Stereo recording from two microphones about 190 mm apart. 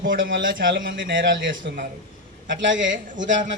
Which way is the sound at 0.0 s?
50° right (ahead or behind).